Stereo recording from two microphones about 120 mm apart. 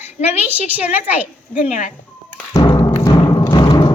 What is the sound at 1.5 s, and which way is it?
Speech, 85° left.